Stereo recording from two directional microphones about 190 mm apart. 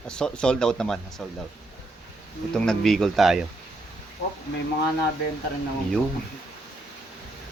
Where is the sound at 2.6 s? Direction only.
5° left (ahead or behind).